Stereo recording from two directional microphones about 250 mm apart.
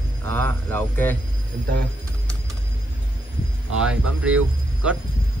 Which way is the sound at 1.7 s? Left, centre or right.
Centre.